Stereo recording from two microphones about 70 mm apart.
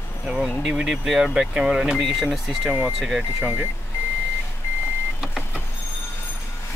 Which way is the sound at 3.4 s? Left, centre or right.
Right.